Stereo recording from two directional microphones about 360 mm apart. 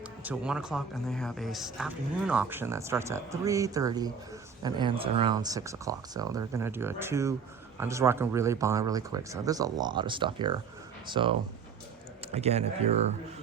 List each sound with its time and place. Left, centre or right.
0.3 s speech: centre